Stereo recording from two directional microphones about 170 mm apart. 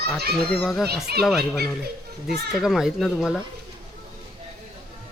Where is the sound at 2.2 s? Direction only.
Centre (ahead or behind).